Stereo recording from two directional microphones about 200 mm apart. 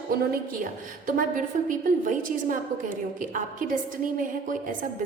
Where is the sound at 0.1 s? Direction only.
45° right (ahead or behind).